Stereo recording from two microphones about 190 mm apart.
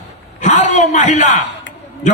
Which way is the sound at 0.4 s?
40° left (ahead or behind).